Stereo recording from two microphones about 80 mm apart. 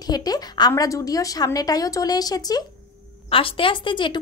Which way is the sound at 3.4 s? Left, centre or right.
Left.